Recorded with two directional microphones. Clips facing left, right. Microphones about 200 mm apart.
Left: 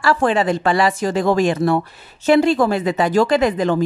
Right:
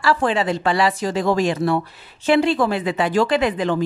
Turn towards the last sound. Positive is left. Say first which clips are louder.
# left 3 dB
turn(degrees=45)  # may be behind; listen again after turning